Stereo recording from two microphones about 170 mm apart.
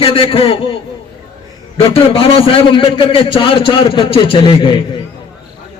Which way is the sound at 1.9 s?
35° left (ahead or behind).